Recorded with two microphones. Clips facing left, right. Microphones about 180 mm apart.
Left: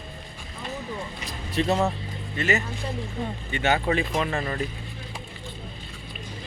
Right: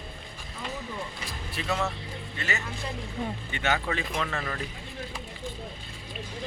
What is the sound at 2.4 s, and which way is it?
Speech, 20° left (ahead or behind).